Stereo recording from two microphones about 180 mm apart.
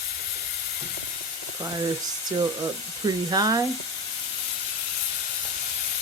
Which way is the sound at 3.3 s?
20° right (ahead or behind).